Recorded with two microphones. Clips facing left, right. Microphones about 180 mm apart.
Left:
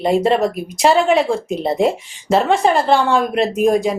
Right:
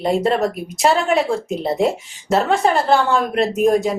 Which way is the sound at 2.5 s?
Centre (ahead or behind).